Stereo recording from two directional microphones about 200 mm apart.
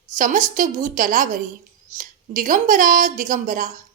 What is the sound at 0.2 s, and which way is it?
A woman's voice, 40° right (ahead or behind).